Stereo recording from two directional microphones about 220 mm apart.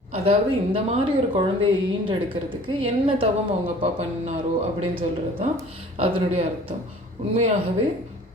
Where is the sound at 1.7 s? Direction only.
20° right (ahead or behind).